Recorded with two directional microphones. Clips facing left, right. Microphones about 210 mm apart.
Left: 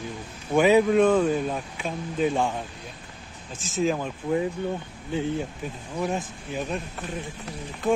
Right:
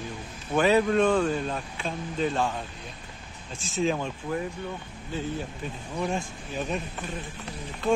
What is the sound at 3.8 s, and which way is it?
Speech, 5° left (ahead or behind).